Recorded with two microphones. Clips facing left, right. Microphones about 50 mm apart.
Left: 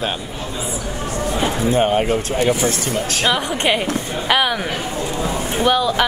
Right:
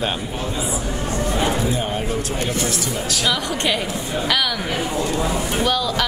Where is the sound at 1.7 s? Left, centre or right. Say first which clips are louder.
Left 7 dB; left.